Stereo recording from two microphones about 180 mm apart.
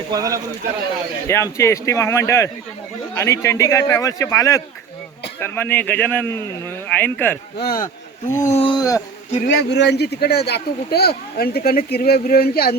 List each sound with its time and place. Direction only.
0.1 s speech: 20° right (ahead or behind)
1.3 s a man's voice: 15° left (ahead or behind)
7.6 s speech: 55° left (ahead or behind)
8.4 s speech: 40° left (ahead or behind); by 9.0 s 25° left (ahead or behind)
9.5 s speech: 65° left (ahead or behind)